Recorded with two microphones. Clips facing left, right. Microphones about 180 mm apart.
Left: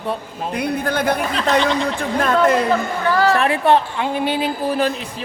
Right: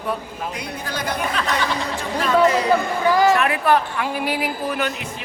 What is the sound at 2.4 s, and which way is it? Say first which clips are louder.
Speech: left 3 dB; 55° left (ahead or behind).